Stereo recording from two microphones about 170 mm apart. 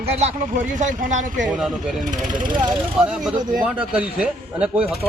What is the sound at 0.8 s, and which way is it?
Speech, 45° right (ahead or behind).